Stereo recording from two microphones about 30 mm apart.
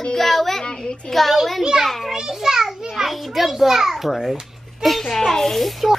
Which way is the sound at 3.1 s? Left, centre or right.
Centre.